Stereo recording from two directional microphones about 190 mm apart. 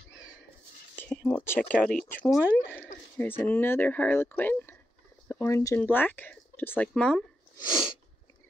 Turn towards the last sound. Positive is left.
turn(degrees=20)  # may be behind; listen again after turning